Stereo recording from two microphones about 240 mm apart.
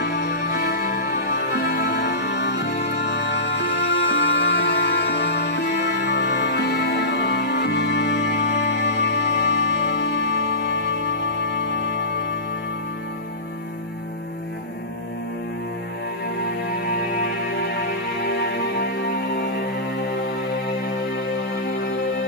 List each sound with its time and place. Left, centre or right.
0.0 s music: left
16.4 s music: left
21.4 s music: left